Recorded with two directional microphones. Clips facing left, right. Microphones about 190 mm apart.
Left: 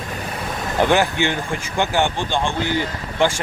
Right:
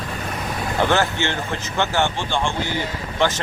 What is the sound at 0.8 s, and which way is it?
Speech, 15° left (ahead or behind).